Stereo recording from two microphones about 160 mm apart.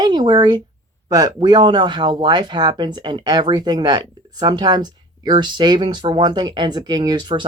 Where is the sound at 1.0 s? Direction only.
25° right (ahead or behind).